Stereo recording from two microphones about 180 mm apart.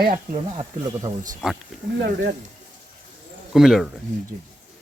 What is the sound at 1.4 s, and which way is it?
Speech, 5° right (ahead or behind).